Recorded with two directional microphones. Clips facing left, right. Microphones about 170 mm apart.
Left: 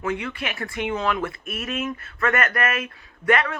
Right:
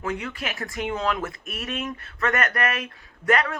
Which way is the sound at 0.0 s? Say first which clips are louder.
Left 2 dB; centre (ahead or behind).